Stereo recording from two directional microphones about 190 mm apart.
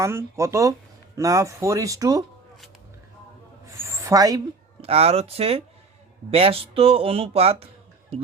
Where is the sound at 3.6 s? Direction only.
15° right (ahead or behind).